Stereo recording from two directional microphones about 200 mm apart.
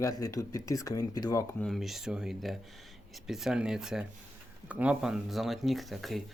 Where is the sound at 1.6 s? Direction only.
Centre (ahead or behind).